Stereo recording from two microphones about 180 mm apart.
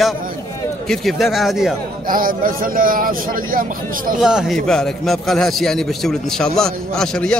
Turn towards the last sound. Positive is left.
turn(degrees=5)  # may be behind; listen again after turning